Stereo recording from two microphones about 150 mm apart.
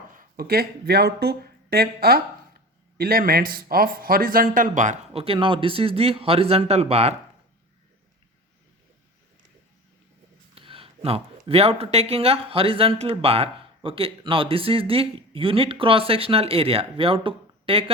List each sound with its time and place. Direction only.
0.1 s speech: 75° right (ahead or behind); by 4.9 s 60° right (ahead or behind)
5.1 s speech: 40° right (ahead or behind)
10.5 s speech: 35° right (ahead or behind)